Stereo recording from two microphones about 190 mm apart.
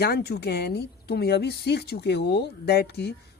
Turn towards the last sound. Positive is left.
turn(degrees=60)  # may be behind; listen again after turning